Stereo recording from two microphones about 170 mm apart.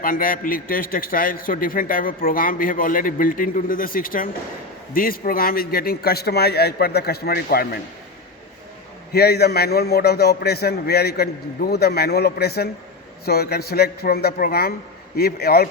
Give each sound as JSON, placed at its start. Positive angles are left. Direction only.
{"t": 0.0, "sound": "a man's voice", "side_deg": 55}
{"t": 9.1, "sound": "a man's voice", "side_deg": 70}